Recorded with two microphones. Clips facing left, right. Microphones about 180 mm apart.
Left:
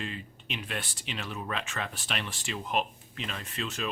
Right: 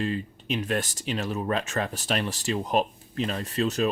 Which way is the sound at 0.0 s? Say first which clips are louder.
Right 10 dB; 40° right (ahead or behind).